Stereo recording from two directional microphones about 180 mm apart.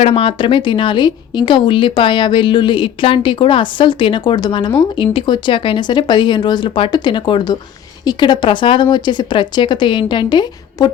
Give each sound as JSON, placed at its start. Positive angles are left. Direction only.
{"t": 0.0, "sound": "a woman's voice", "side_deg": 30}